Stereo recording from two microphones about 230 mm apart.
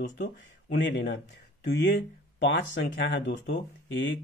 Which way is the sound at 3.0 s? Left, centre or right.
Left.